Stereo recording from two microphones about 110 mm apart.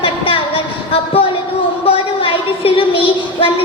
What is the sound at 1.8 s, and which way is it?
A woman's voice, 55° left (ahead or behind).